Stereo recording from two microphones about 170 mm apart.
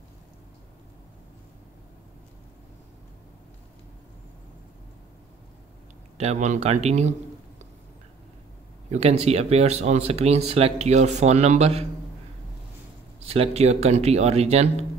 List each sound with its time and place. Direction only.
6.1 s speech: 40° right (ahead or behind)
8.9 s speech: 40° right (ahead or behind)
13.3 s speech: 40° right (ahead or behind)